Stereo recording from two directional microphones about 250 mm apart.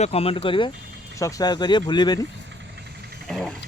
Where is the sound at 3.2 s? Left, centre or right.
Centre.